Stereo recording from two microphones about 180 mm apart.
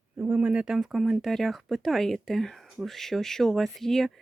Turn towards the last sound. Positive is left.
turn(degrees=0)  # may be behind; listen again after turning